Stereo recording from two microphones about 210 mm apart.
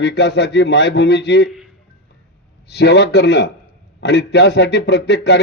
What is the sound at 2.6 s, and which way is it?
Speech, 50° left (ahead or behind).